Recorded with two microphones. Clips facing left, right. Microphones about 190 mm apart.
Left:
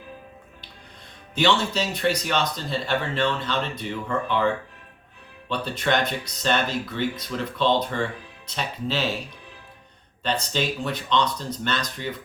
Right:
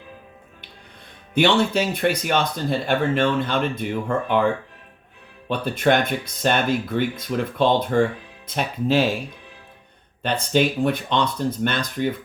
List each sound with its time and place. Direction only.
1.3 s speech: 55° right (ahead or behind)
5.5 s speech: 50° right (ahead or behind)
10.2 s speech: 55° right (ahead or behind)